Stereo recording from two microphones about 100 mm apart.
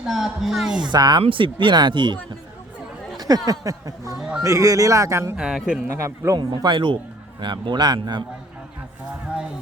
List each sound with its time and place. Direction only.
0.1 s speech: centre (ahead or behind)
0.9 s speech: 45° right (ahead or behind)
1.2 s speech: 60° right (ahead or behind)
3.2 s speech: 40° right (ahead or behind)
4.2 s speech: 5° right (ahead or behind)
4.4 s speech: 35° right (ahead or behind)
5.4 s speech: 5° right (ahead or behind)
6.0 s a man's voice: 30° right (ahead or behind)
6.6 s speech: 50° right (ahead or behind)